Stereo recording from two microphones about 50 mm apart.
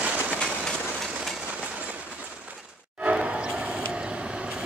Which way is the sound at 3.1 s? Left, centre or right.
Right.